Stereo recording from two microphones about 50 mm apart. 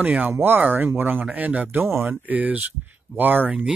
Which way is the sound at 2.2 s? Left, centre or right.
Right.